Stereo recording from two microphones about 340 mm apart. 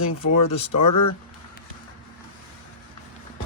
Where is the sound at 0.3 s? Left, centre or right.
Left.